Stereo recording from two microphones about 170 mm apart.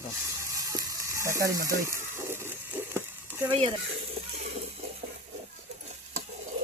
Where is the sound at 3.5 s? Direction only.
30° right (ahead or behind).